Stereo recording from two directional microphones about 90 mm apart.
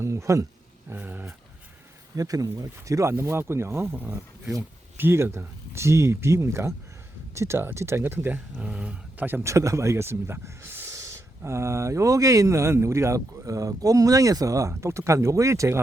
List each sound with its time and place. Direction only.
0.0 s a sound: 35° right (ahead or behind)
0.9 s dog: 20° right (ahead or behind)
2.1 s speech: 40° right (ahead or behind)